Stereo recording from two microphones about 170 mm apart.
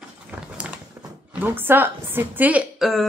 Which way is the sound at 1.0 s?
15° right (ahead or behind).